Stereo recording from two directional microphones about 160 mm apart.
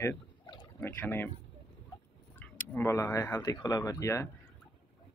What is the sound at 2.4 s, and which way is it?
Speech, 15° left (ahead or behind).